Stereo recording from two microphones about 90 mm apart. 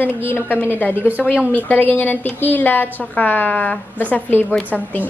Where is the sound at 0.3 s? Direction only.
25° left (ahead or behind).